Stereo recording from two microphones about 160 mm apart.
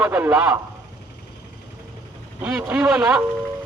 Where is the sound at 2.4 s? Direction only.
5° right (ahead or behind).